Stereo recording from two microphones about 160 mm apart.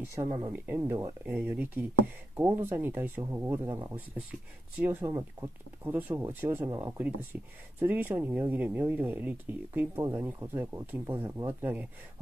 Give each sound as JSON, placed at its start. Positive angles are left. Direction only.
{"t": 0.1, "sound": "speech", "side_deg": -20}